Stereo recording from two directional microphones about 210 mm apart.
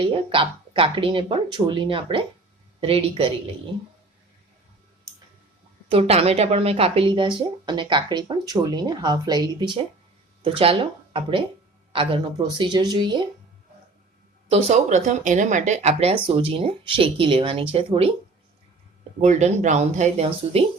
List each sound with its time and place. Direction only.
0.0 s speech: 25° right (ahead or behind)
5.9 s speech: 30° right (ahead or behind)
14.5 s speech: 35° right (ahead or behind)
19.2 s speech: 35° right (ahead or behind)